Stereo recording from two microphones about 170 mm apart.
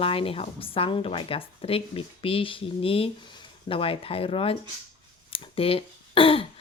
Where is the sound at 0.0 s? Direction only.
35° left (ahead or behind).